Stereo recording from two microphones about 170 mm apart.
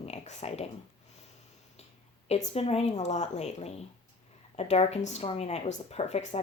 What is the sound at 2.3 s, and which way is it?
Speech, 40° left (ahead or behind).